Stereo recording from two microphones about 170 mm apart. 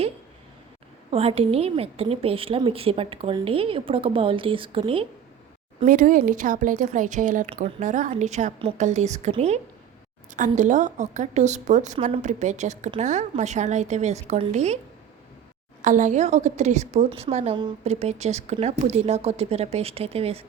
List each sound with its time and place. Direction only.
1.1 s a woman's voice: 35° right (ahead or behind)
5.8 s a woman's voice: 50° right (ahead or behind)
15.8 s a woman's voice: 45° right (ahead or behind)